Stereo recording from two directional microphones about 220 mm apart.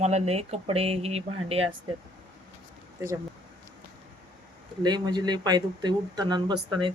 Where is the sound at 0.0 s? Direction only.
30° right (ahead or behind).